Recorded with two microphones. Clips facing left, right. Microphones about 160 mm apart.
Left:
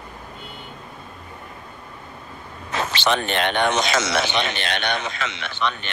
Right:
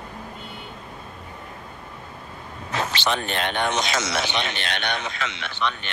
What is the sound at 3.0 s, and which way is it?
Speech, 80° left.